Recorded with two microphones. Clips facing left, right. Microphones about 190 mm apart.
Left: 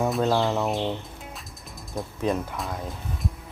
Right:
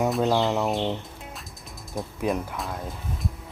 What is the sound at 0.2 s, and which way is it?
Speech, 15° right (ahead or behind).